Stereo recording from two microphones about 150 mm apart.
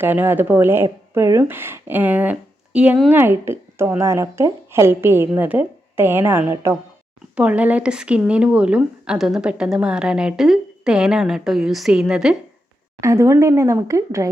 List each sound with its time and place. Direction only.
0.0 s a woman's voice: 15° right (ahead or behind)
13.0 s speech: 20° right (ahead or behind)